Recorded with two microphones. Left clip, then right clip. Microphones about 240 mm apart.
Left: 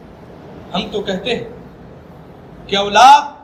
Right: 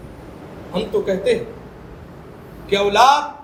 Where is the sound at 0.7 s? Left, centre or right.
Right.